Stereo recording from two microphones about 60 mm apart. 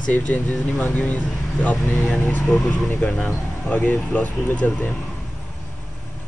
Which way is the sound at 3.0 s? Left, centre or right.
Left.